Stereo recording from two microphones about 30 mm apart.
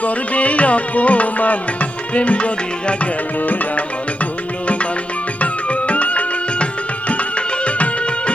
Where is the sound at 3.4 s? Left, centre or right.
Left.